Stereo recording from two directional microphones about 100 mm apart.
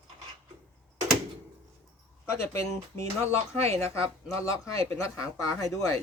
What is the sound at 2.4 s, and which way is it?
Speech, 25° left (ahead or behind).